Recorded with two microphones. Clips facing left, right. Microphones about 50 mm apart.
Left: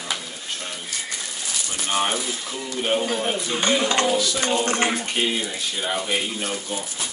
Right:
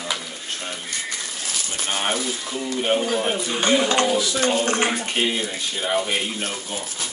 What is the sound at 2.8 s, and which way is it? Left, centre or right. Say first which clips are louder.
Speech: right 1 dB; centre.